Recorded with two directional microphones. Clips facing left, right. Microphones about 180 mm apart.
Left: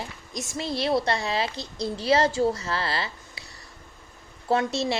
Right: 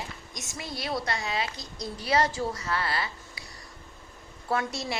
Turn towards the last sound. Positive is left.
turn(degrees=25)  # may be behind; listen again after turning